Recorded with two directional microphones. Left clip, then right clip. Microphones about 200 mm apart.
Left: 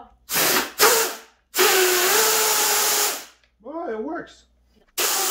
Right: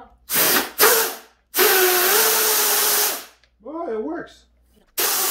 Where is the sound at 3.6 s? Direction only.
5° right (ahead or behind).